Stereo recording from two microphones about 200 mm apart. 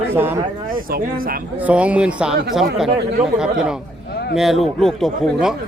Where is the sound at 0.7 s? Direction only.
45° right (ahead or behind).